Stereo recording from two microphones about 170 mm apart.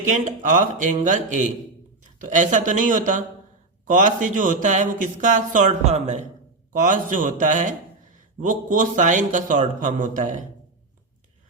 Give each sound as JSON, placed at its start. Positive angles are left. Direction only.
{"t": 0.1, "sound": "a man's voice", "side_deg": -45}